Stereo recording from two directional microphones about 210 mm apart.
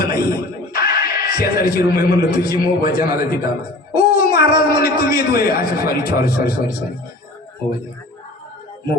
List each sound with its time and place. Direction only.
0.0 s music: 45° left (ahead or behind)
1.9 s a man's voice: 45° left (ahead or behind)